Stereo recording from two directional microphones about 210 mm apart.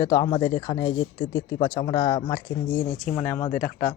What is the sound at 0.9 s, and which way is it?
Speech, 65° left (ahead or behind).